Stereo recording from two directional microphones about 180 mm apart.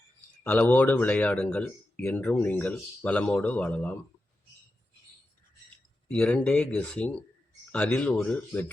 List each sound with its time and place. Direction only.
0.4 s speech: 10° left (ahead or behind)
6.1 s speech: 5° left (ahead or behind)